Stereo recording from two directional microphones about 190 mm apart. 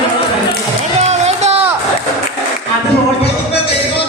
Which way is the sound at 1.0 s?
35° right (ahead or behind).